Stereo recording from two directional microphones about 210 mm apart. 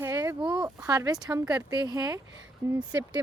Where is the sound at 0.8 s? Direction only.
15° right (ahead or behind).